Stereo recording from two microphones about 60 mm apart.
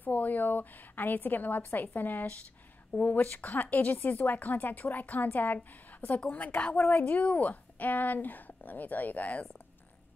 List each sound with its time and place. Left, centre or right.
0.0 s a woman's voice: left